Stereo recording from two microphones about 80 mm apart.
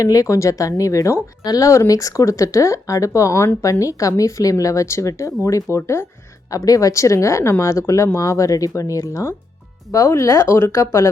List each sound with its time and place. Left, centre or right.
0.0 s speech: left
6.5 s speech: left